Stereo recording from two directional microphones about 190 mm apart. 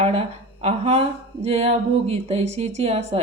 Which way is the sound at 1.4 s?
35° right (ahead or behind).